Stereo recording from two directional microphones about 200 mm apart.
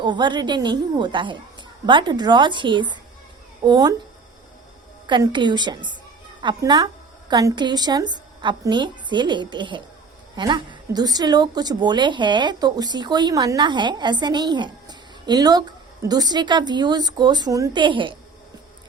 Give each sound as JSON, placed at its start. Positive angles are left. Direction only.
{"t": 0.0, "sound": "a woman's voice", "side_deg": -25}
{"t": 5.0, "sound": "a woman's voice", "side_deg": -25}